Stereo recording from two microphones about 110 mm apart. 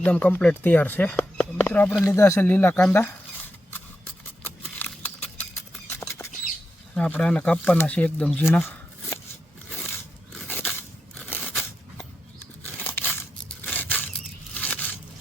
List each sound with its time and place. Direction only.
0.0 s speech: 15° left (ahead or behind)
2.8 s scissors: 20° left (ahead or behind)
4.8 s a sound: 15° left (ahead or behind)
6.9 s speech: 10° left (ahead or behind)
10.5 s scissors: 20° left (ahead or behind)
12.8 s a sound: 15° left (ahead or behind)
13.7 s scissors: 15° left (ahead or behind)